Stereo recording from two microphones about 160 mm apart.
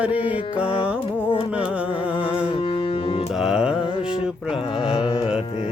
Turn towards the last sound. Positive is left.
turn(degrees=-5)  # may be behind; listen again after turning